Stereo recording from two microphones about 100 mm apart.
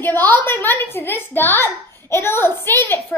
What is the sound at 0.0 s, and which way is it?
A child's voice, 20° left (ahead or behind).